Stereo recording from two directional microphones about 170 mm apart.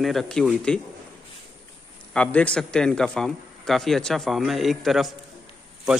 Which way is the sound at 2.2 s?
5° left (ahead or behind).